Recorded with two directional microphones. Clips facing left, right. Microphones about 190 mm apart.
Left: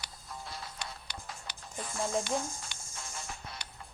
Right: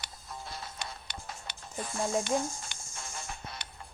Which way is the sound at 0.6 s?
25° right (ahead or behind).